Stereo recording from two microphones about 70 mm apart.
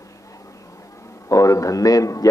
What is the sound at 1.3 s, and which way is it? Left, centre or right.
A man's voice, left.